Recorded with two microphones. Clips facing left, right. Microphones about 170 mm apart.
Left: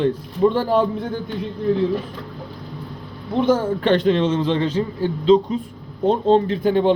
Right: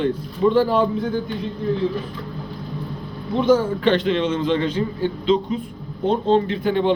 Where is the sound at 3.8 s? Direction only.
45° left (ahead or behind).